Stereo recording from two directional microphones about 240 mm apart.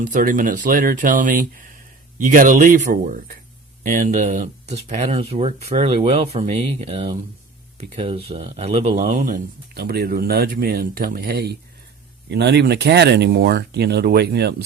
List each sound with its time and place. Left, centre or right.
0.0 s speech: right